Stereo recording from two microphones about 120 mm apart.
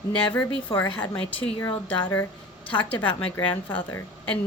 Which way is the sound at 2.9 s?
35° left (ahead or behind).